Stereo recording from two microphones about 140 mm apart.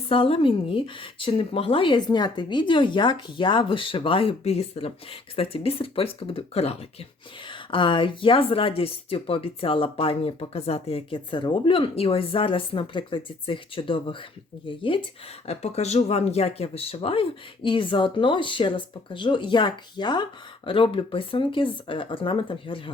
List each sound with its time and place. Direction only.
0.1 s speech: 40° left (ahead or behind)
7.4 s speech: 35° left (ahead or behind)
15.4 s speech: 50° left (ahead or behind)